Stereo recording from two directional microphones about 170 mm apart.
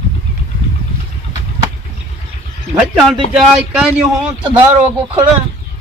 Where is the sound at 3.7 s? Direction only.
5° right (ahead or behind).